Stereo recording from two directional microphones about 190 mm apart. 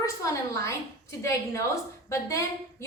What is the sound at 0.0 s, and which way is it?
A woman's voice, 15° left (ahead or behind).